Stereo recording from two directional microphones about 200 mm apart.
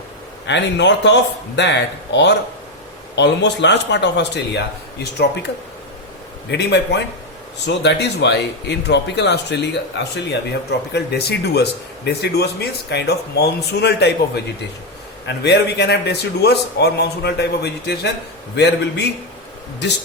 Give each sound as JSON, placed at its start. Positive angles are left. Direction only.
{"t": 0.4, "sound": "speech", "side_deg": 60}
{"t": 6.5, "sound": "speech", "side_deg": 55}
{"t": 15.4, "sound": "speech", "side_deg": 55}